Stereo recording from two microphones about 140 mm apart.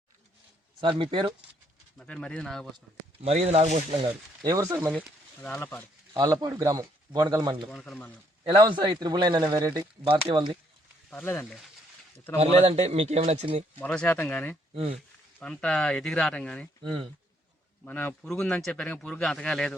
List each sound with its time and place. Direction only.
0.8 s a man's voice: 35° right (ahead or behind)
2.0 s a man's voice: 5° left (ahead or behind)
3.2 s a man's voice: 50° right (ahead or behind)
4.6 s speech: 15° right (ahead or behind)
4.9 s speech: 5° left (ahead or behind)
6.1 s speech: 25° right (ahead or behind)
7.7 s speech: 5° left (ahead or behind)
8.4 s a man's voice: 35° right (ahead or behind)
10.0 s a man's voice: 40° right (ahead or behind)
11.1 s speech: 15° left (ahead or behind)
12.4 s a man's voice: 50° right (ahead or behind)
13.7 s a man's voice: 10° left (ahead or behind)